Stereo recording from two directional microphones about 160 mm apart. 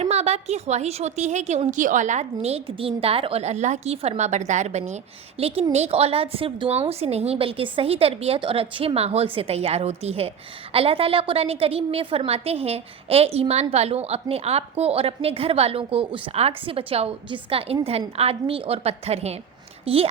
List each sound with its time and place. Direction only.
0.0 s a woman's voice: 40° right (ahead or behind)